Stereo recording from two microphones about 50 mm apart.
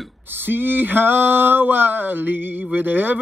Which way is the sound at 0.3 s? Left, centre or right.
Right.